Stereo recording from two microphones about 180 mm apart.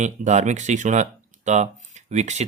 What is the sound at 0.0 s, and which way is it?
Speech, 40° right (ahead or behind).